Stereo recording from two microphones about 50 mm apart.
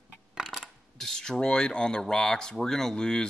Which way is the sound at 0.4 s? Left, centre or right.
Centre.